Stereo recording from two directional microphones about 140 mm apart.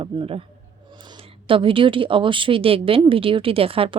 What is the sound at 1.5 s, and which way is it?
A woman's voice, 40° right (ahead or behind).